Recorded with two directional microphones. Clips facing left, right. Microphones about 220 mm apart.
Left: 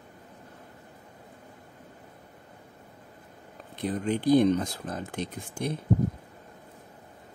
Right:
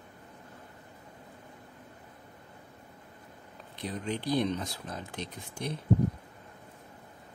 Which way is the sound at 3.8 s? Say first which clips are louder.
Left 7 dB; 50° left (ahead or behind).